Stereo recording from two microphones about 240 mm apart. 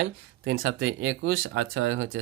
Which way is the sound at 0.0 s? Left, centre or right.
Right.